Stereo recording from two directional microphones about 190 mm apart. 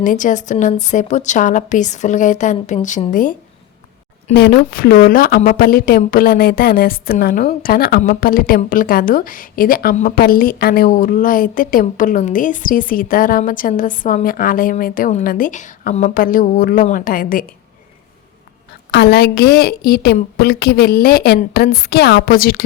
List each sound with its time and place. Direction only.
0.0 s a woman's voice: 45° left (ahead or behind)
4.4 s a woman's voice: 55° left (ahead or behind)
18.9 s a woman's voice: 60° left (ahead or behind)